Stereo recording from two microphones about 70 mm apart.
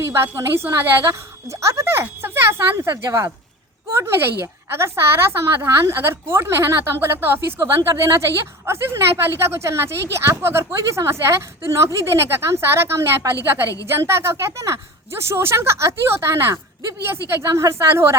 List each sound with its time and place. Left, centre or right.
0.0 s a woman's voice: right
3.9 s speech: right
7.9 s a woman's voice: right